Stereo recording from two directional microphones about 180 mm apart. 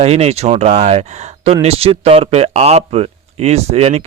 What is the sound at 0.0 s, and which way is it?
Speech, 35° right (ahead or behind).